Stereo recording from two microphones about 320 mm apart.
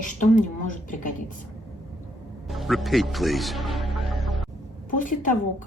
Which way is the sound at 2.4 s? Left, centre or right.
Centre.